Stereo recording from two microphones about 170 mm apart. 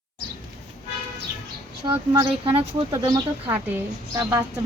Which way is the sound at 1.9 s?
30° right (ahead or behind).